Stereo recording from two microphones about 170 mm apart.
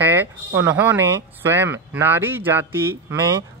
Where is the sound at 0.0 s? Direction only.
15° right (ahead or behind).